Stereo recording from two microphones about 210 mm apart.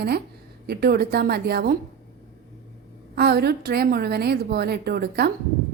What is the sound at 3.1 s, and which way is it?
A woman's voice, 50° right (ahead or behind).